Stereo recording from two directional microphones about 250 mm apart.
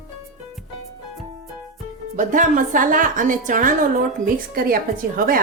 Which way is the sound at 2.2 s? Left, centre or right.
Right.